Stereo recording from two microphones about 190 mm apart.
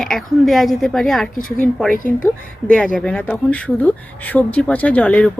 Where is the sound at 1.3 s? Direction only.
45° left (ahead or behind).